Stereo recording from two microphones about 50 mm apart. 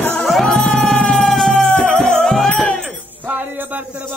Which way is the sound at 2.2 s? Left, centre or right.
Centre.